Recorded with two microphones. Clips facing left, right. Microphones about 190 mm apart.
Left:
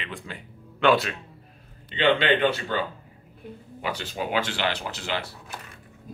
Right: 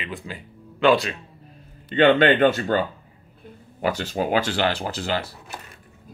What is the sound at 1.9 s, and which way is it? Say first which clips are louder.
Speech: right 6 dB; 50° right (ahead or behind).